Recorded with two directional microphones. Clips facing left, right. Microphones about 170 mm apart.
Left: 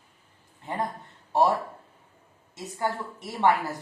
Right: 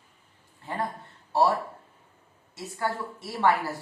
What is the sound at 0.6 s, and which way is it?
Speech, 20° left (ahead or behind).